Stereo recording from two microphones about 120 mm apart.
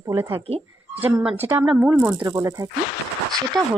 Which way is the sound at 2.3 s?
30° right (ahead or behind).